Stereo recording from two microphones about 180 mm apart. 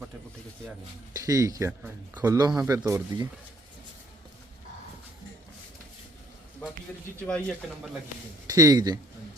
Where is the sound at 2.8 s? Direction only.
10° right (ahead or behind).